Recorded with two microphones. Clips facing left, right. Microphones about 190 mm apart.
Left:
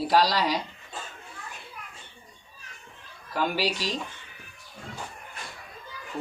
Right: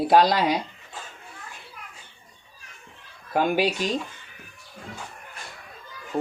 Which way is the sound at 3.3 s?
50° right (ahead or behind).